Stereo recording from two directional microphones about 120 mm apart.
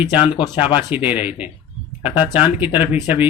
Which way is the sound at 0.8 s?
15° right (ahead or behind).